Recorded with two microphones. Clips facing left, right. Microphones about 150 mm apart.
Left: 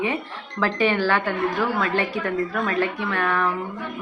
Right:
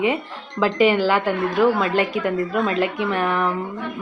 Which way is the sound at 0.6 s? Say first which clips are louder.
Right 4 dB; 15° right (ahead or behind).